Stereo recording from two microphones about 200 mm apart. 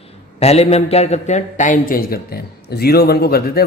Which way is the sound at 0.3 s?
30° left (ahead or behind).